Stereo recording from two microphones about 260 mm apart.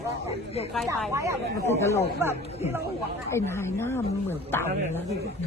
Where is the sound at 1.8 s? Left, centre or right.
Centre.